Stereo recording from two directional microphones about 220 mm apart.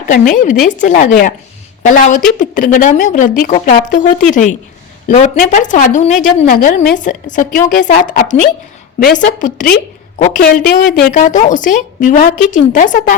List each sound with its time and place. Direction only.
0.1 s a woman's voice: 35° left (ahead or behind)